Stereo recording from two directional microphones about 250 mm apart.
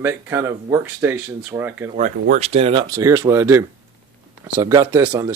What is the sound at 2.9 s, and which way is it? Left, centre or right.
Speech, centre.